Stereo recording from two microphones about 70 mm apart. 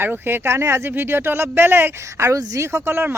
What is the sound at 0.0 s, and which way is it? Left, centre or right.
Speech, right.